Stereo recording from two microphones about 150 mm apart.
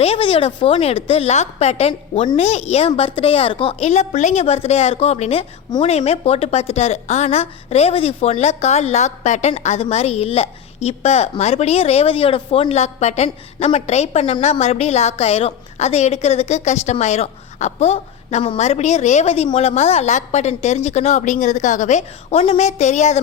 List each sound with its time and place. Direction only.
0.0 s a woman's voice: 40° left (ahead or behind)